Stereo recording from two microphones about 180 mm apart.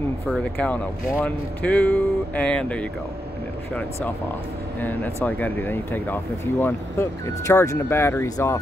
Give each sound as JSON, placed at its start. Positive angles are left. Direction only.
{"t": 0.3, "sound": "speech", "side_deg": 5}
{"t": 4.7, "sound": "speech", "side_deg": 10}